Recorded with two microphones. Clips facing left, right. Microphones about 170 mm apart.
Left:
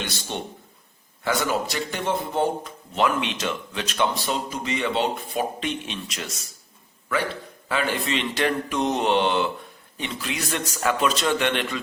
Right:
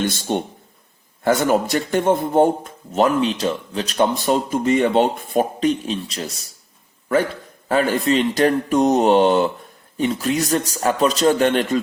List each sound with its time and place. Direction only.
0.0 s speech: 50° right (ahead or behind)
7.7 s a man's voice: 45° right (ahead or behind)